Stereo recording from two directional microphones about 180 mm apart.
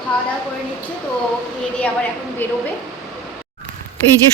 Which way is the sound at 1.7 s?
5° left (ahead or behind).